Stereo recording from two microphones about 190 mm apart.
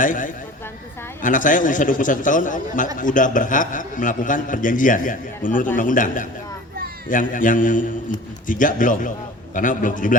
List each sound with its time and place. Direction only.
0.0 s a man's voice: 45° left (ahead or behind)